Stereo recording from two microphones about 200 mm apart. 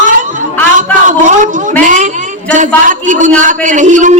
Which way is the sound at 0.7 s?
40° right (ahead or behind).